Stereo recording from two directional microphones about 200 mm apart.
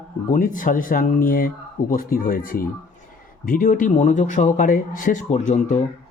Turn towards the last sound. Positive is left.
turn(degrees=40)  # may be behind; listen again after turning